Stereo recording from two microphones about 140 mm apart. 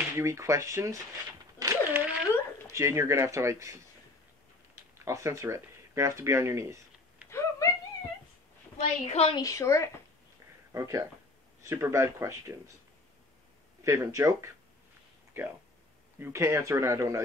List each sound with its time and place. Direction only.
0.1 s a man's voice: 20° right (ahead or behind)
4.9 s speech: 20° right (ahead or behind)
7.2 s a sound: 20° left (ahead or behind)
9.0 s a woman's voice: 50° left (ahead or behind)
9.3 s a woman's voice: 25° left (ahead or behind)
10.7 s a man's voice: 20° right (ahead or behind)
13.8 s a man's voice: 20° right (ahead or behind)